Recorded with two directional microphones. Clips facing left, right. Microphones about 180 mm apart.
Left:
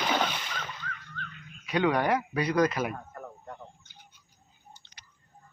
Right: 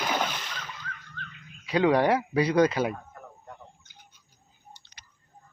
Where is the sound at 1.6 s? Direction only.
30° right (ahead or behind).